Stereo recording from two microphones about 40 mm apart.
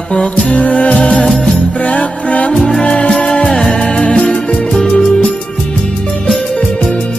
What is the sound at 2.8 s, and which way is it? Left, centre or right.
Music, left.